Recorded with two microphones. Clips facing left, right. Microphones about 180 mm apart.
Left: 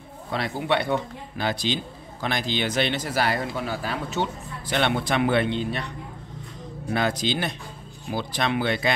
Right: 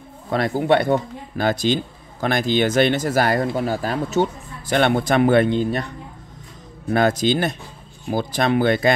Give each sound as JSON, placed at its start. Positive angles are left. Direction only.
{"t": 0.3, "sound": "speech", "side_deg": -45}
{"t": 6.9, "sound": "speech", "side_deg": -50}